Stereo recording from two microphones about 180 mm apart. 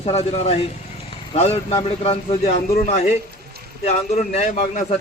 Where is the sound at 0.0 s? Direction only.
35° left (ahead or behind).